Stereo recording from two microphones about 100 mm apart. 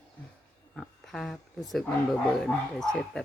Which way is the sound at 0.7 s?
Centre (ahead or behind).